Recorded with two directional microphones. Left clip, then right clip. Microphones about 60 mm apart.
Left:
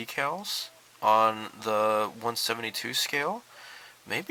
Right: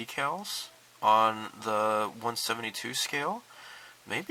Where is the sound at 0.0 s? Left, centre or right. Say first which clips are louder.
Left 2 dB; left.